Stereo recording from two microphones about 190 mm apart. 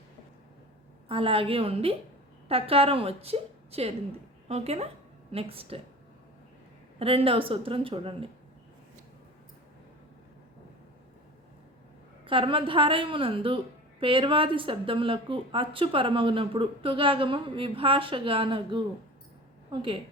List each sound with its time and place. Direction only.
1.0 s a woman's voice: 30° right (ahead or behind)
7.0 s a woman's voice: 30° right (ahead or behind)
12.2 s a woman's voice: 25° right (ahead or behind)